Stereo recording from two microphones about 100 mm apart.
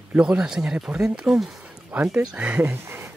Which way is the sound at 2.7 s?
25° right (ahead or behind).